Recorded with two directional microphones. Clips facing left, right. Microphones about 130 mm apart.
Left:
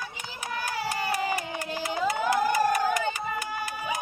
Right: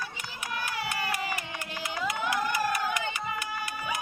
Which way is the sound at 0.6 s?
35° left (ahead or behind).